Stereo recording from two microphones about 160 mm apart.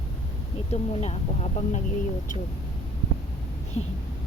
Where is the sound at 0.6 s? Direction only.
40° left (ahead or behind).